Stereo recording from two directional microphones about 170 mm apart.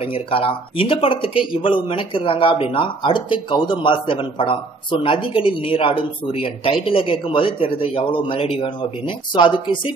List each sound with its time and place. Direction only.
0.1 s speech: 30° left (ahead or behind)